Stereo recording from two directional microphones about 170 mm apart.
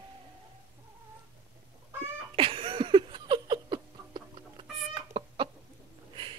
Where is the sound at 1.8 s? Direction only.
15° right (ahead or behind).